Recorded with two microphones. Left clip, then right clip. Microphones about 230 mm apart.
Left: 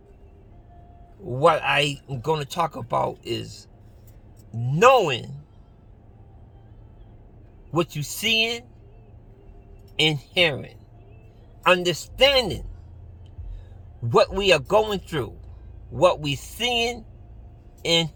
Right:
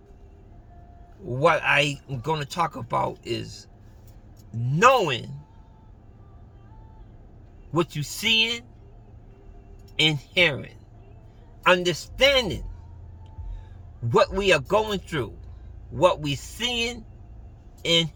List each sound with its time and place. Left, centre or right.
1.3 s speech: centre
7.7 s speech: centre
10.0 s speech: centre
14.7 s speech: centre